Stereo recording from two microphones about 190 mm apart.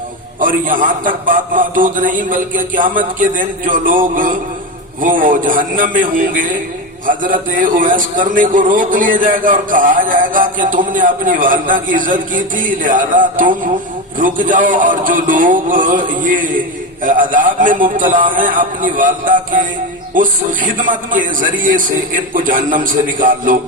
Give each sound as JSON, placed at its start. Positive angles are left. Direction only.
{"t": 0.3, "sound": "a man's voice", "side_deg": -45}